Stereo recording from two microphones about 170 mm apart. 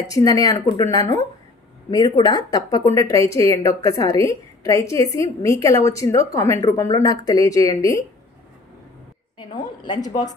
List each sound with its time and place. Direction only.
0.0 s speech: 20° left (ahead or behind)
9.8 s speech: 25° left (ahead or behind)